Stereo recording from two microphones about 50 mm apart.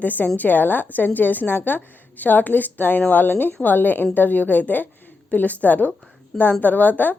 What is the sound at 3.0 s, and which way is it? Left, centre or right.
Speech, left.